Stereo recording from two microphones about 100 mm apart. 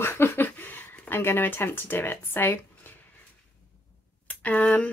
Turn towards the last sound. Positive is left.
turn(degrees=15)  # may be behind; listen again after turning